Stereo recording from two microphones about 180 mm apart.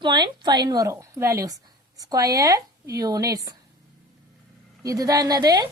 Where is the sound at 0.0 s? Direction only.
25° right (ahead or behind).